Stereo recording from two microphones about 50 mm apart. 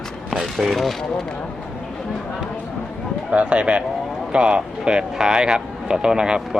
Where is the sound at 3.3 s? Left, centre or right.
Right.